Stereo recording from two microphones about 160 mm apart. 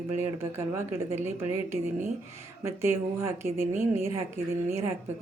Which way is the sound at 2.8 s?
15° right (ahead or behind).